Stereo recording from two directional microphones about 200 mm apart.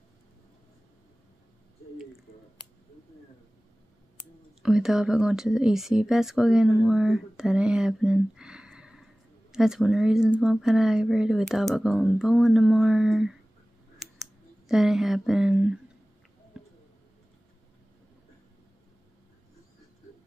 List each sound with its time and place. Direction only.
4.6 s speech: centre (ahead or behind)
14.7 s speech: centre (ahead or behind)